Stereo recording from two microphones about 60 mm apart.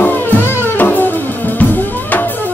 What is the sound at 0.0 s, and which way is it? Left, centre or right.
Music, left.